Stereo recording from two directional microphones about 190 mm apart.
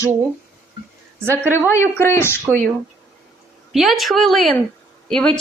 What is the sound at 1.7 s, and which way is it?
Speech, 15° left (ahead or behind).